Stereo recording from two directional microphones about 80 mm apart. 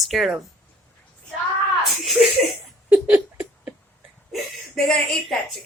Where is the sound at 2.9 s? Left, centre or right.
Right.